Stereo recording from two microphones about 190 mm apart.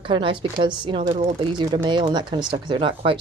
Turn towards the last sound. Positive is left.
turn(degrees=-25)  # may be behind; listen again after turning